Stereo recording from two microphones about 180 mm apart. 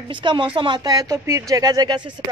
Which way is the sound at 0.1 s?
25° right (ahead or behind).